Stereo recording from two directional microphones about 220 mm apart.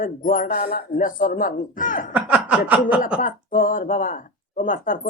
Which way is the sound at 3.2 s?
40° left (ahead or behind).